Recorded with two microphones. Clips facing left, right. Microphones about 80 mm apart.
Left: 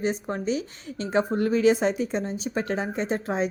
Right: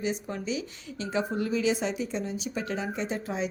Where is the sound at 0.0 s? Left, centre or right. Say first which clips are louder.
Left 5 dB; left.